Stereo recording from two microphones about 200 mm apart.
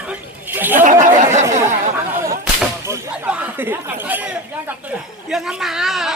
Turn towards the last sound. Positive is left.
turn(degrees=0)  # may be behind; listen again after turning